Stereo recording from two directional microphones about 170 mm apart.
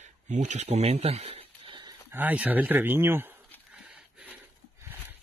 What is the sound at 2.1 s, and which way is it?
Speech, 10° right (ahead or behind).